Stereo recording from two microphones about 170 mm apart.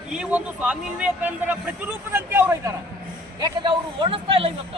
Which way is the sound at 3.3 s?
25° right (ahead or behind).